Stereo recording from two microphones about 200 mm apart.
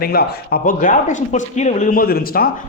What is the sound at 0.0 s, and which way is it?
Speech, 50° left (ahead or behind).